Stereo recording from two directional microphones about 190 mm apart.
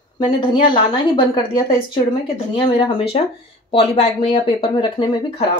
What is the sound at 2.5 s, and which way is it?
Speech, 25° left (ahead or behind).